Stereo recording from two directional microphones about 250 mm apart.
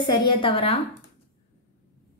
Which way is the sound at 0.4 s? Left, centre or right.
Left.